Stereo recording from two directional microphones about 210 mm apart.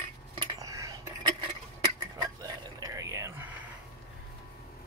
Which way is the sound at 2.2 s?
20° right (ahead or behind).